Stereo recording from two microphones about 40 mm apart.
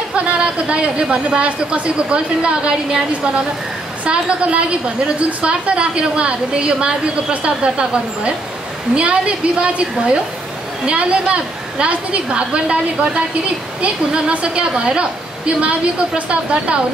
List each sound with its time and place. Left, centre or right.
0.1 s a woman's voice: right